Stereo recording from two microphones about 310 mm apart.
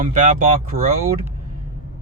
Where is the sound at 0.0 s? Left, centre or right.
Right.